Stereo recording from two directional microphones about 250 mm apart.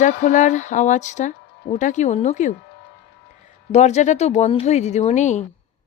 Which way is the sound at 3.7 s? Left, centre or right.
Left.